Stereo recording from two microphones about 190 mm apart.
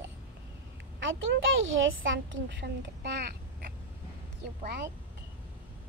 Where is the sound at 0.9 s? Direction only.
80° right.